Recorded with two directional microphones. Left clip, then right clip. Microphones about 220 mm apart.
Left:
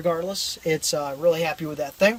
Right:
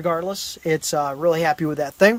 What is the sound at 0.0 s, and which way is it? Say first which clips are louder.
Speech: right 1 dB; 10° right (ahead or behind).